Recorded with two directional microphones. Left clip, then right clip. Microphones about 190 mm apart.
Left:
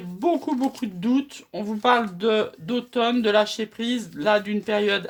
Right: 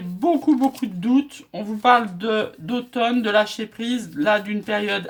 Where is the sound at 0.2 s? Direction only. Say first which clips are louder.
Right 4 dB; 25° left (ahead or behind).